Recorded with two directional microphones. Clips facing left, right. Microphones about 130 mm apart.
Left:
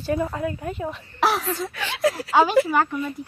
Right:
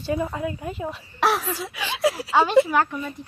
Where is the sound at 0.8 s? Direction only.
Centre (ahead or behind).